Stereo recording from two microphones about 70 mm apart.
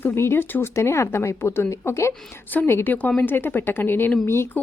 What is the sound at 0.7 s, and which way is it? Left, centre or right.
Speech, left.